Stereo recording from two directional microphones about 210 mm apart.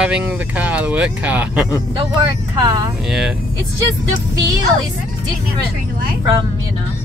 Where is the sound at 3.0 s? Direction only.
Centre (ahead or behind).